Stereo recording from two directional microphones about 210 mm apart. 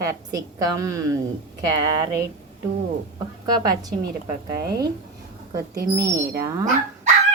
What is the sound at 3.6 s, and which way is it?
Speech, 15° right (ahead or behind).